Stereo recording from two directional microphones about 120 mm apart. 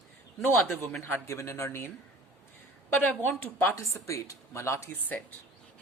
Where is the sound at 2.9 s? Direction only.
15° left (ahead or behind).